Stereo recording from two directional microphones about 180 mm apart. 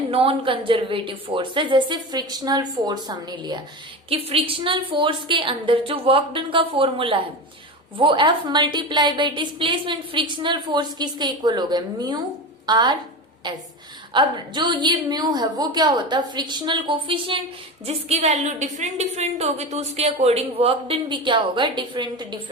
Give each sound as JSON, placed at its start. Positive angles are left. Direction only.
{"t": 0.1, "sound": "a woman's voice", "side_deg": -30}
{"t": 14.1, "sound": "a woman's voice", "side_deg": -25}